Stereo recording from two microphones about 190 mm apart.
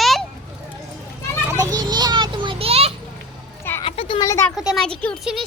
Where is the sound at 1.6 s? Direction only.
20° right (ahead or behind).